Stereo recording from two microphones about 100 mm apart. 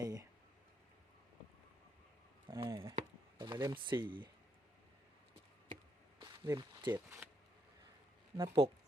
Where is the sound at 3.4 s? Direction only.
45° right (ahead or behind).